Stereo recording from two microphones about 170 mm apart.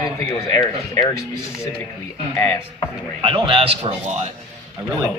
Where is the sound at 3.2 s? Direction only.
30° right (ahead or behind).